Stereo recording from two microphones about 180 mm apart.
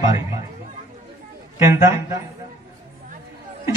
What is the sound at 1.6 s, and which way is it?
Speech, 15° right (ahead or behind).